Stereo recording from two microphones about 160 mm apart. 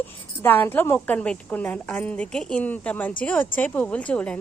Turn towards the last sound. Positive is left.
turn(degrees=10)  # may be behind; listen again after turning